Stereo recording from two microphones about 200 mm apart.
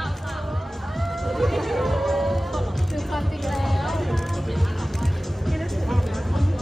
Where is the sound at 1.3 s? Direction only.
Centre (ahead or behind).